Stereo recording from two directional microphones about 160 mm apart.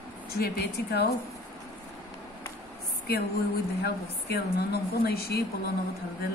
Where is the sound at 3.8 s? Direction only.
90° left; by 5.7 s 75° left (ahead or behind).